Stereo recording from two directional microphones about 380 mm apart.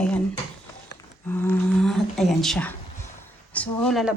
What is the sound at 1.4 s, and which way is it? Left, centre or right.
A woman's voice, centre.